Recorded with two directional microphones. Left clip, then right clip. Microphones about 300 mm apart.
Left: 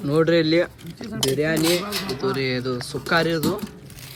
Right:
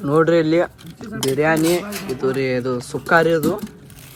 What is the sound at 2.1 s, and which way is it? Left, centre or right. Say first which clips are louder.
Speech: right 6 dB; centre.